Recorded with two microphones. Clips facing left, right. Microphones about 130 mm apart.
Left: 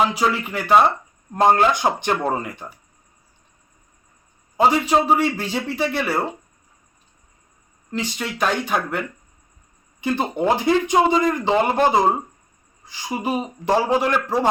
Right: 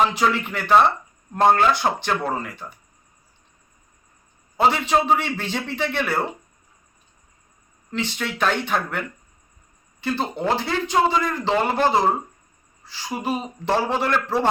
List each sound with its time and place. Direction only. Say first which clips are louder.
0.2 s a man's voice: even; 10° left (ahead or behind)
4.5 s a man's voice: left 2 dB; 10° left (ahead or behind)
7.9 s a man's voice: left 1 dB; 10° left (ahead or behind)
12.8 s a sound: even; 15° left (ahead or behind)
13.1 s a man's voice: left 2 dB; 10° left (ahead or behind)